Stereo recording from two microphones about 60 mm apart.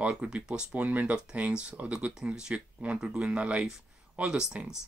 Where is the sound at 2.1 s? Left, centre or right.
Centre.